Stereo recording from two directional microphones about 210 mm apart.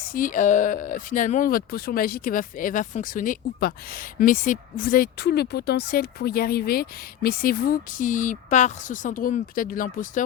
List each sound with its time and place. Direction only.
0.1 s speech: 40° left (ahead or behind)